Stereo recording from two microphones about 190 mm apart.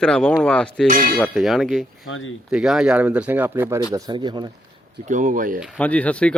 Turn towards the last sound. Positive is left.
turn(degrees=5)  # may be behind; listen again after turning